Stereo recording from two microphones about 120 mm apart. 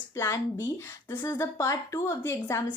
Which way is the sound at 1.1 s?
20° left (ahead or behind).